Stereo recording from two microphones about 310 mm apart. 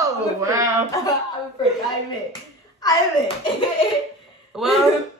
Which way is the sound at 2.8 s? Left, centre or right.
Centre.